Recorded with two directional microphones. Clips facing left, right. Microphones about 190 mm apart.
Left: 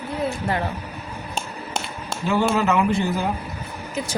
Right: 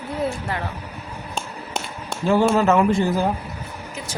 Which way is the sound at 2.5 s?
40° right (ahead or behind).